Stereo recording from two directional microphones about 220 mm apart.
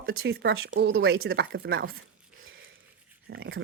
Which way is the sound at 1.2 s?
45° right (ahead or behind).